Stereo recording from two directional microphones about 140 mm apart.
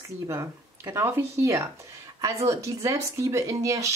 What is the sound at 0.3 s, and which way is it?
Speech, 20° right (ahead or behind).